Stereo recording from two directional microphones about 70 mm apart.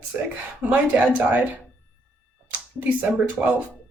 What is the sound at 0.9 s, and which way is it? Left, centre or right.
Speech, right.